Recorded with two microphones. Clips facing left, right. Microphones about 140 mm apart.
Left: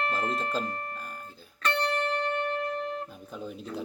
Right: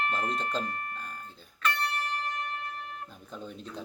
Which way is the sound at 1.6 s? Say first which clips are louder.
Left 4 dB; 35° left (ahead or behind).